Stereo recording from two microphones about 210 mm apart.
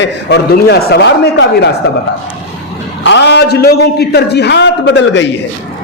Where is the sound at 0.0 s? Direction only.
55° left (ahead or behind).